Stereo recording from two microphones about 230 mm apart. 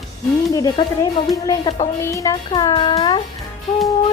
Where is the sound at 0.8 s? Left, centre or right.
Left.